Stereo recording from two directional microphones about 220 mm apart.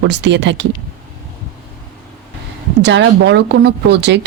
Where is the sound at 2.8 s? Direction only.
55° right (ahead or behind).